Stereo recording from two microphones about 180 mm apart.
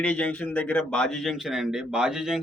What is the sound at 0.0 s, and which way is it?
Speech, 5° left (ahead or behind).